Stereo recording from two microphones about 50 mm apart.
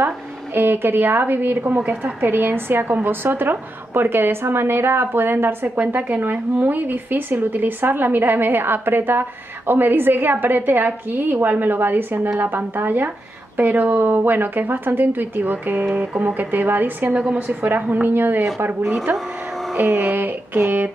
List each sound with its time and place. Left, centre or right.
0.6 s a woman's voice: right
17.1 s a woman's voice: right